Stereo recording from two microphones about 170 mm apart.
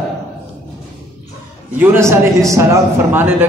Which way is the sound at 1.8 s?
15° right (ahead or behind).